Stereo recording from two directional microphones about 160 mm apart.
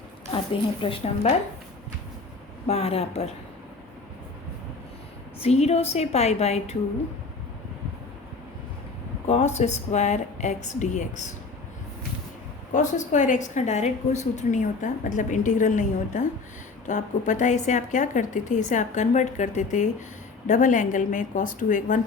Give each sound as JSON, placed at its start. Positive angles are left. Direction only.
{"t": 0.8, "sound": "a woman's voice", "side_deg": 35}
{"t": 2.6, "sound": "a woman's voice", "side_deg": 40}
{"t": 5.4, "sound": "a woman's voice", "side_deg": 40}
{"t": 9.2, "sound": "a woman's voice", "side_deg": 45}
{"t": 12.7, "sound": "a woman's voice", "side_deg": 50}